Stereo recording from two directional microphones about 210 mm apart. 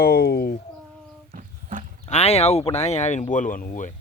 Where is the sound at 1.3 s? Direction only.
40° right (ahead or behind).